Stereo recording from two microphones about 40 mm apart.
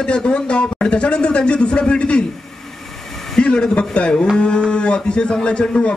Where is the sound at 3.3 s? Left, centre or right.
Left.